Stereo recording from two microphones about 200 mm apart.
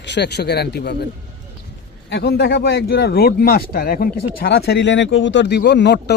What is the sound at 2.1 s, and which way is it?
Speech, 55° left (ahead or behind).